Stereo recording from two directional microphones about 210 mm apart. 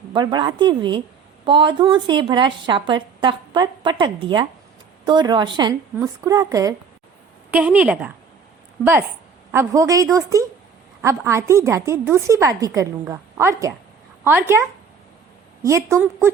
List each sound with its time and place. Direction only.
0.1 s a woman's voice: 20° right (ahead or behind)
9.5 s a woman's voice: 15° right (ahead or behind)